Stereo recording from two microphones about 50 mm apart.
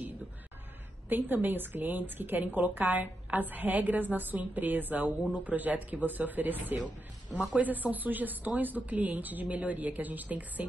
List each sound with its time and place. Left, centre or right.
1.0 s a woman's voice: right